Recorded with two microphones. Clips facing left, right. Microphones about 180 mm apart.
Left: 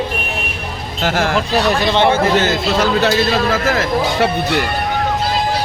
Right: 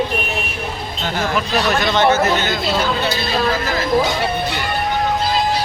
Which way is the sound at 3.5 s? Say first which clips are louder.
Left 1 dB; 80° left.